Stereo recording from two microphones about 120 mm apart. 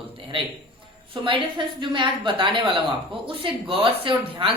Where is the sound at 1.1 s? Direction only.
45° right (ahead or behind).